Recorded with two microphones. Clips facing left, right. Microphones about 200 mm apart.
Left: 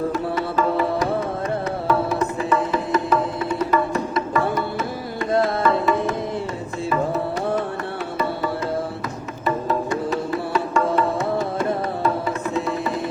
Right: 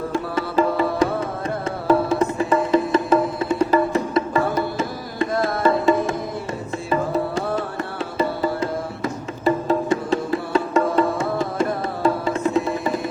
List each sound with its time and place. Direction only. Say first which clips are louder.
0.1 s music: even; 25° right (ahead or behind)
9.4 s music: right 3 dB; 25° right (ahead or behind)